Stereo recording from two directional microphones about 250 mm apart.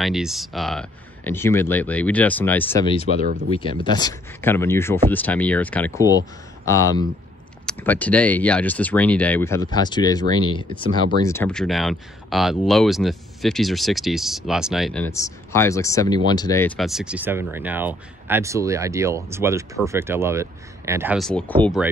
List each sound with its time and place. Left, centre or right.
0.0 s speech: centre
3.2 s speech: right
3.8 s speech: centre
11.2 s speech: centre